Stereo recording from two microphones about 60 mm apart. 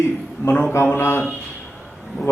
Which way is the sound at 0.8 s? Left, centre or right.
Left.